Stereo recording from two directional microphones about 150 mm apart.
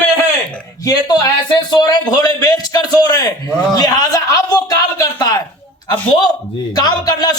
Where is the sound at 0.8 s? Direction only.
25° left (ahead or behind).